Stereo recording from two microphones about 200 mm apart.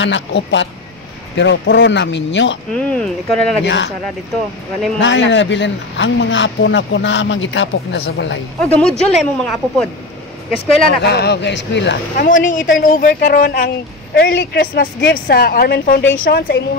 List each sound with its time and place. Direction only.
0.0 s speech: 65° left (ahead or behind)
2.7 s speech: 5° left (ahead or behind)
3.6 s speech: 65° left (ahead or behind)
5.0 s speech: 65° left (ahead or behind)
8.5 s speech: 5° left (ahead or behind)
11.0 s speech: 55° left (ahead or behind)
12.2 s a woman's voice: 40° left (ahead or behind)